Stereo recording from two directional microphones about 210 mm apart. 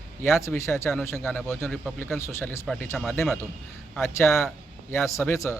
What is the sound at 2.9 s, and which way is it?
Speech, centre (ahead or behind).